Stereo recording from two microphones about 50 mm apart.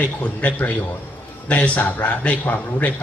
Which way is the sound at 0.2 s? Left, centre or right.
Left.